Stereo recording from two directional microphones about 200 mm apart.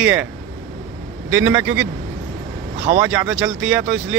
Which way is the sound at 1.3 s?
10° right (ahead or behind).